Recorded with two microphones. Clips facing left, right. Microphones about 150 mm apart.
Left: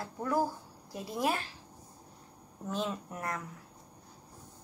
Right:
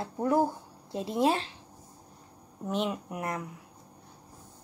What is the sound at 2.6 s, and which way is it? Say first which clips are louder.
Speech: right 4 dB; 20° right (ahead or behind).